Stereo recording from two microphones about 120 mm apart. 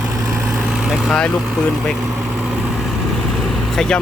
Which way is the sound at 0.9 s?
5° left (ahead or behind).